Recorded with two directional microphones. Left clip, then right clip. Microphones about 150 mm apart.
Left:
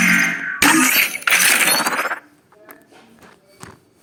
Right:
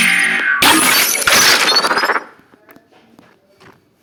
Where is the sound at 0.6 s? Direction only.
5° right (ahead or behind).